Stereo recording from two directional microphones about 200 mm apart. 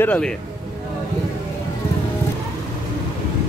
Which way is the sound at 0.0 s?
5° left (ahead or behind).